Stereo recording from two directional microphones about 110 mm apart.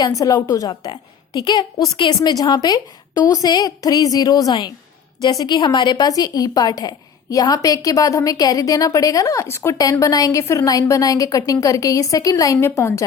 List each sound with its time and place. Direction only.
0.0 s a woman's voice: 35° left (ahead or behind)
12.5 s a woman's voice: 25° left (ahead or behind)